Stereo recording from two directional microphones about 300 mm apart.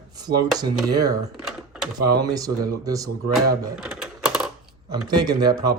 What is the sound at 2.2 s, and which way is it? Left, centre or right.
Speech, centre.